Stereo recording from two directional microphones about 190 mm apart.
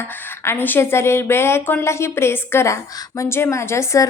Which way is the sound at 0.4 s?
10° left (ahead or behind).